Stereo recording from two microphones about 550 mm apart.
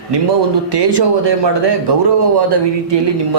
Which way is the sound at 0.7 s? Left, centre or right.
Right.